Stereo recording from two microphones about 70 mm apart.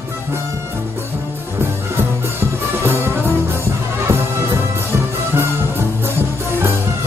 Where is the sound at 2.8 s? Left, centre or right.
Right.